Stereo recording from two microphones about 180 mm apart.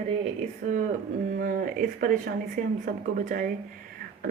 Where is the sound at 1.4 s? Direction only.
50° right (ahead or behind).